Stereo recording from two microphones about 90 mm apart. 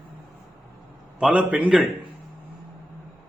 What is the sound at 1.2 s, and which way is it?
Speech, 15° right (ahead or behind).